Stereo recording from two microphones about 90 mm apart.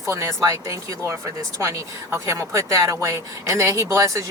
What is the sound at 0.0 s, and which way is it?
Speech, 35° right (ahead or behind).